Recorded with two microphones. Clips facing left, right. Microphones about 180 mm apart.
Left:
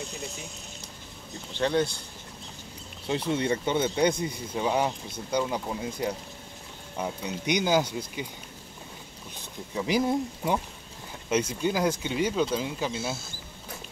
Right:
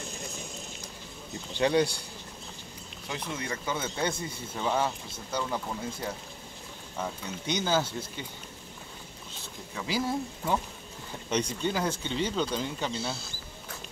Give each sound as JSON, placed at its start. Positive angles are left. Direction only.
{"t": 1.6, "sound": "speech", "side_deg": -10}
{"t": 3.1, "sound": "speech", "side_deg": 30}
{"t": 9.3, "sound": "speech", "side_deg": 20}
{"t": 11.2, "sound": "speech", "side_deg": 5}